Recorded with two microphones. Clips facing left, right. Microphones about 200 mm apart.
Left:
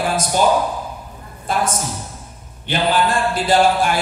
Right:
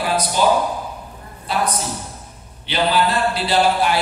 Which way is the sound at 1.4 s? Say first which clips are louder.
Left 1 dB; 50° left (ahead or behind).